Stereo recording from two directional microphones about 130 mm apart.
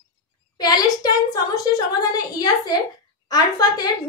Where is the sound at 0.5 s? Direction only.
30° left (ahead or behind).